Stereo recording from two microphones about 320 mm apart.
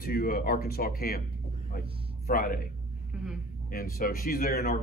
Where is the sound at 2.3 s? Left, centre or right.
Left.